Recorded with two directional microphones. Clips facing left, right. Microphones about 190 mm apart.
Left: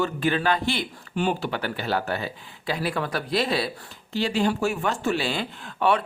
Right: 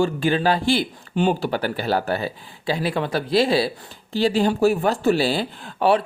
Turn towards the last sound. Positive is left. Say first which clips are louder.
# right 4 dB
turn(degrees=-30)  # may be behind; listen again after turning